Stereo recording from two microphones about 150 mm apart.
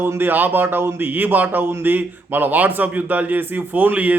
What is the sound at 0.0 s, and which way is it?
A man's voice, 15° right (ahead or behind).